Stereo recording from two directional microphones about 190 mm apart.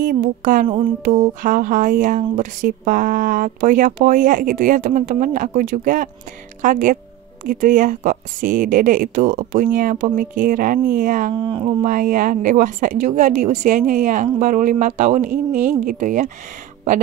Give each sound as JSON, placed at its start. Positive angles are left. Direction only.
{"t": 0.0, "sound": "speech", "side_deg": -45}
{"t": 11.3, "sound": "speech", "side_deg": -25}
{"t": 11.8, "sound": "speech", "side_deg": -45}